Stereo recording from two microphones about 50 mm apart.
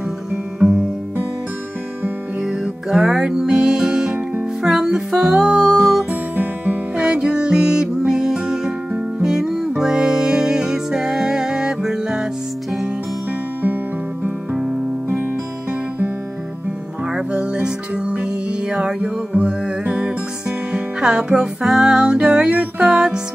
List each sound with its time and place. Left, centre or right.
0.3 s music: centre
2.4 s music: centre
4.6 s music: centre
6.0 s music: right
7.0 s music: centre
17.1 s music: right